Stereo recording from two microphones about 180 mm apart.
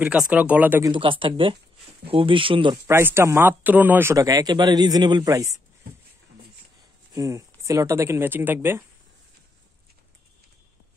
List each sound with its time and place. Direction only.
0.0 s a man's voice: 5° right (ahead or behind)
0.9 s speech: 30° right (ahead or behind)
2.9 s a man's voice: 10° right (ahead or behind)
7.2 s a man's voice: 15° right (ahead or behind)